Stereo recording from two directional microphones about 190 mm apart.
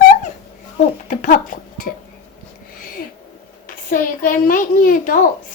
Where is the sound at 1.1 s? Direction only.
45° left (ahead or behind).